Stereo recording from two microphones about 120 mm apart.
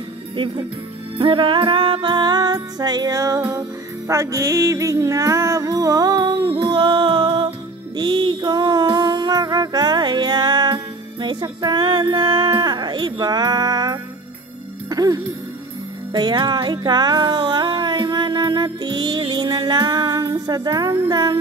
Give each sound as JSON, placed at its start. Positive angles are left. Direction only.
{"t": 0.4, "sound": "music", "side_deg": -40}